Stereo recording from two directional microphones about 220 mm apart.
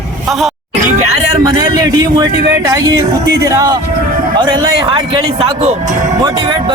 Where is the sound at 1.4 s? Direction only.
20° right (ahead or behind).